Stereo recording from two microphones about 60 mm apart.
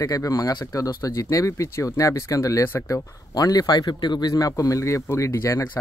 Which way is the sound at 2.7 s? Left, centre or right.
Left.